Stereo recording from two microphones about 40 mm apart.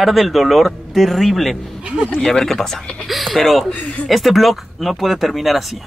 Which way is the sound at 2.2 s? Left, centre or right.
Centre.